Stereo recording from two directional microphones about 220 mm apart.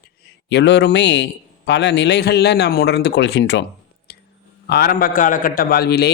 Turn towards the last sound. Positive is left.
turn(degrees=45)  # may be behind; listen again after turning